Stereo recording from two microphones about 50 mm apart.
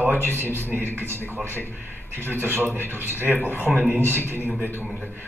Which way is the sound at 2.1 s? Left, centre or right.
Right.